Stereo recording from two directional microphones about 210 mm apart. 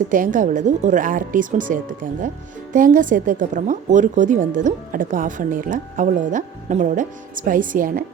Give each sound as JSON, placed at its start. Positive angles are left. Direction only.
{"t": 0.1, "sound": "a woman's voice", "side_deg": -40}